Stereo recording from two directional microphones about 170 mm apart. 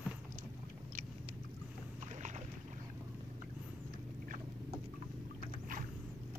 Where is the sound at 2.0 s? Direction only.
45° right (ahead or behind).